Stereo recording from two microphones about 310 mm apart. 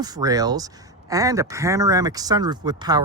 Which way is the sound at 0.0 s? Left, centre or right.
Centre.